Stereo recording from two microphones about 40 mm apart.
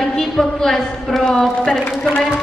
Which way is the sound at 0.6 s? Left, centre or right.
Centre.